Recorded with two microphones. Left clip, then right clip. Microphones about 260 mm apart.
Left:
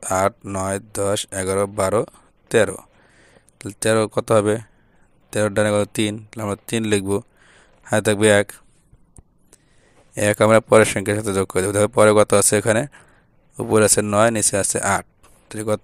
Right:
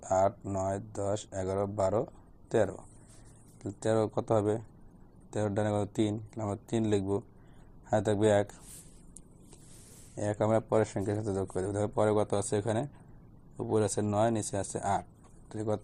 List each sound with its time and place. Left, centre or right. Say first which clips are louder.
0.0 s speech: left 8 dB; left
10.2 s speech: left 15 dB; left